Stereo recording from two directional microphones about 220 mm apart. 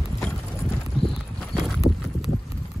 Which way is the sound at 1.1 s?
Centre (ahead or behind).